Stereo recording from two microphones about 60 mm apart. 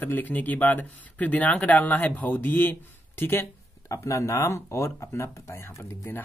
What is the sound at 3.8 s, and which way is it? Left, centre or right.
Speech, left.